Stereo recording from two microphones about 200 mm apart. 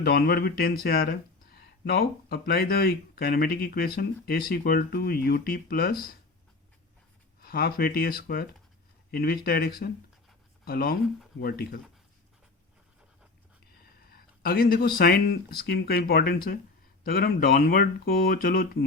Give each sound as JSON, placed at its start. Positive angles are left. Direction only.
{"t": 0.0, "sound": "speech", "side_deg": 50}
{"t": 7.4, "sound": "speech", "side_deg": 50}
{"t": 14.1, "sound": "speech", "side_deg": 50}